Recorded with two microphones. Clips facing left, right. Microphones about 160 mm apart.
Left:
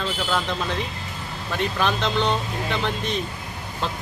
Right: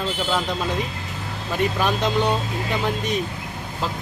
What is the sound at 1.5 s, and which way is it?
Speech, 10° right (ahead or behind).